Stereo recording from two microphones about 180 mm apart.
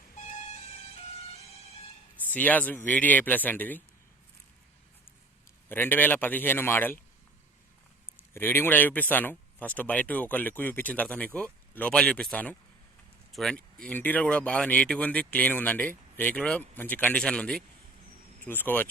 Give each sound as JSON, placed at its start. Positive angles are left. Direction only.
{"t": 0.2, "sound": "music", "side_deg": 40}
{"t": 2.2, "sound": "speech", "side_deg": 10}
{"t": 5.6, "sound": "speech", "side_deg": 10}
{"t": 8.1, "sound": "speech", "side_deg": 10}